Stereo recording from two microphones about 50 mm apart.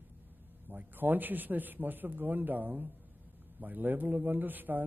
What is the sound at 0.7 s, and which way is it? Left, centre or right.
A man's voice, right.